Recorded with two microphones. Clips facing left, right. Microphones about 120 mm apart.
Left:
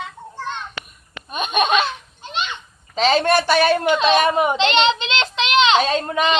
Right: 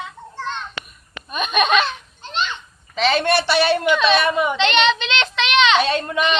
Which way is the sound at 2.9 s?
40° left (ahead or behind).